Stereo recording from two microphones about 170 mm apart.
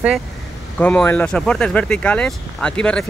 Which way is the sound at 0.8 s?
10° left (ahead or behind).